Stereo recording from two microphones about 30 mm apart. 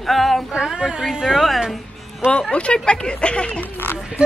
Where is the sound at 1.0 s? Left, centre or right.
Centre.